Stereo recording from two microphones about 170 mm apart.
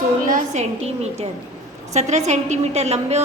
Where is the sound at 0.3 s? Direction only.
40° right (ahead or behind).